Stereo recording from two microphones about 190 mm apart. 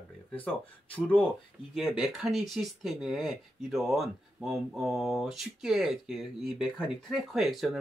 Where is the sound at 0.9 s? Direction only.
10° left (ahead or behind).